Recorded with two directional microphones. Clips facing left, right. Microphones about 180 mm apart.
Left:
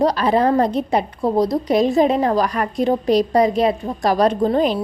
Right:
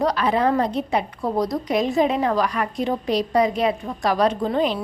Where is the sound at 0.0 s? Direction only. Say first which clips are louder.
Left 4 dB; 35° left (ahead or behind).